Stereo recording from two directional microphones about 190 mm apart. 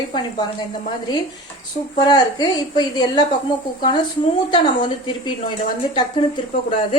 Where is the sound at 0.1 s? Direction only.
25° left (ahead or behind).